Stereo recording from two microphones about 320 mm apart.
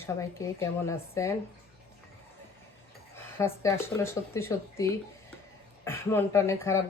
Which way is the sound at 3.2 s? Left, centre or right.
Centre.